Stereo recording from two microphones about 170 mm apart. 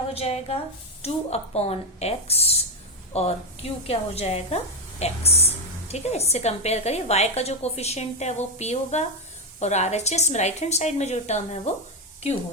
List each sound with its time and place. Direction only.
0.1 s a woman's voice: 35° left (ahead or behind)